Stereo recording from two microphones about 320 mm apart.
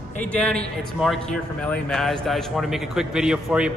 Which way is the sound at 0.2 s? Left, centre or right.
Centre.